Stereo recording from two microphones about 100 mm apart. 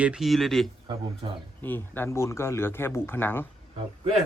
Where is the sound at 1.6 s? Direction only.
20° left (ahead or behind).